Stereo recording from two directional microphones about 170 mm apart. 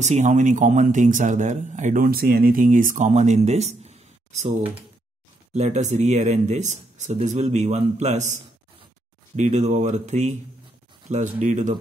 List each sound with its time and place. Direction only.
0.0 s speech: 45° right (ahead or behind)
9.4 s speech: 45° right (ahead or behind)
11.3 s speech: 45° right (ahead or behind)